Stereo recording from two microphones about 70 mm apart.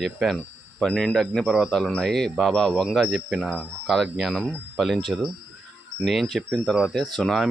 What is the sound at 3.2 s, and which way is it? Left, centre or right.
Speech, centre.